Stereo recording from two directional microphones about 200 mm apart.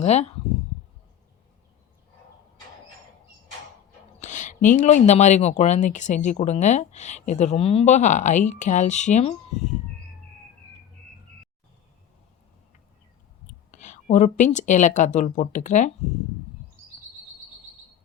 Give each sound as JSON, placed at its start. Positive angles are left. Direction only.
{"t": 0.0, "sound": "speech", "side_deg": 35}
{"t": 4.2, "sound": "speech", "side_deg": 40}
{"t": 13.7, "sound": "speech", "side_deg": 35}